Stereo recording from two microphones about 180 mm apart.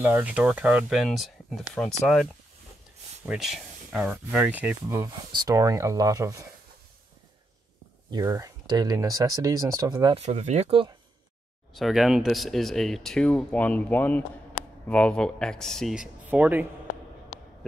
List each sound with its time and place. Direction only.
0.0 s speech: 10° right (ahead or behind)
3.3 s speech: centre (ahead or behind); by 6.4 s 15° right (ahead or behind)
8.1 s speech: 20° right (ahead or behind)
10.1 s speech: 40° right (ahead or behind)
11.7 s speech: centre (ahead or behind)